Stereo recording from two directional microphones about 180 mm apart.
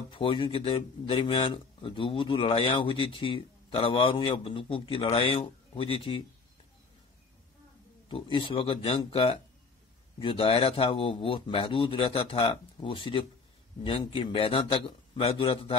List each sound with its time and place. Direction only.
0.1 s speech: 30° left (ahead or behind)
8.1 s a man's voice: 30° left (ahead or behind)